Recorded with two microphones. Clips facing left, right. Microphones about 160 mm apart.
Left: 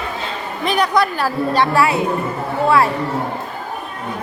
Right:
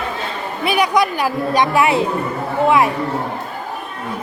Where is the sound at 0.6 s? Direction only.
10° right (ahead or behind).